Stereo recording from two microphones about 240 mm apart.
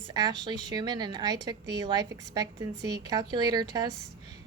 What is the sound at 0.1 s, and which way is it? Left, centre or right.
A woman's voice, centre.